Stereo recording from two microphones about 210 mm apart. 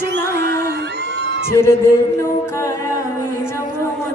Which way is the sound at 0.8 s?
55° right (ahead or behind).